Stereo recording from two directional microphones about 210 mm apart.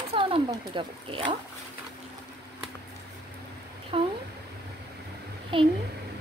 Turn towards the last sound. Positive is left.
turn(degrees=-25)  # may be behind; listen again after turning